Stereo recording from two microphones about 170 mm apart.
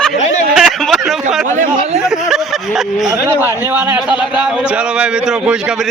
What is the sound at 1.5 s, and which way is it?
Speech, 45° right (ahead or behind).